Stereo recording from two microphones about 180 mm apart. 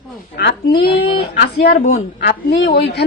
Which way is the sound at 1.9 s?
75° left (ahead or behind).